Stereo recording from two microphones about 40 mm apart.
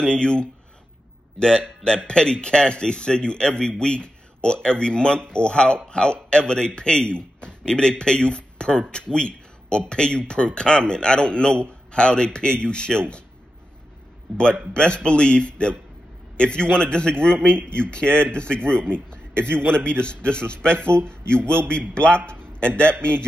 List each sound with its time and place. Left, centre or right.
0.0 s a man's voice: left
14.3 s a man's voice: left
17.6 s speech: right
17.8 s a man's voice: left